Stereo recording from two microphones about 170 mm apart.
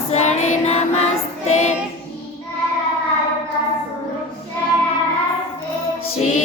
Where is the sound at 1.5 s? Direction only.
40° left (ahead or behind).